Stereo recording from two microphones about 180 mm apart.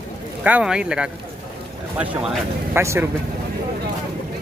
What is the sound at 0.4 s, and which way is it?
Speech, 5° right (ahead or behind).